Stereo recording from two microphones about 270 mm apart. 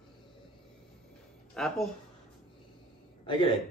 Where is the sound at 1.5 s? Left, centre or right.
Centre.